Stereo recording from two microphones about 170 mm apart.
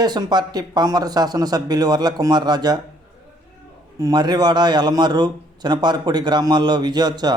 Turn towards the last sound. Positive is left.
turn(degrees=-25)  # may be behind; listen again after turning